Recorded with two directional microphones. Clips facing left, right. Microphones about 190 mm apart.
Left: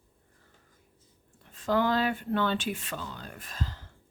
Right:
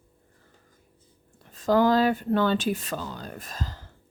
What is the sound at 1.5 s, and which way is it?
A woman's voice, 40° right (ahead or behind).